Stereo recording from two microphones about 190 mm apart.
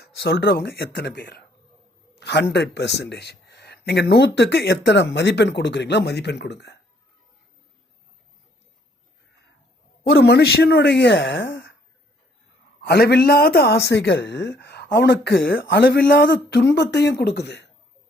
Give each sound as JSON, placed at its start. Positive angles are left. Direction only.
{"t": 0.0, "sound": "speech", "side_deg": 55}
{"t": 10.1, "sound": "speech", "side_deg": 55}
{"t": 12.8, "sound": "speech", "side_deg": 60}